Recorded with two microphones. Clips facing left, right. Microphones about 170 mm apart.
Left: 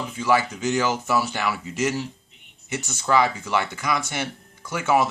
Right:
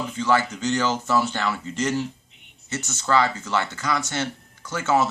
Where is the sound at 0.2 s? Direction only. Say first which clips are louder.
Left 1 dB; 10° left (ahead or behind).